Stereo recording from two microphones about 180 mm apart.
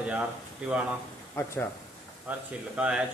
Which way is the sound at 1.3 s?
15° left (ahead or behind).